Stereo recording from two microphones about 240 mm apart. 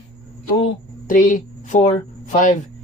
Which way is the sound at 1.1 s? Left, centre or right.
Left.